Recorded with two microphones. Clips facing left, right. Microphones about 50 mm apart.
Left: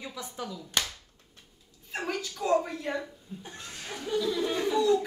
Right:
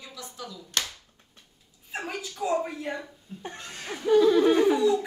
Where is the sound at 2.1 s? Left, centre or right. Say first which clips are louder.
Left 2 dB; centre.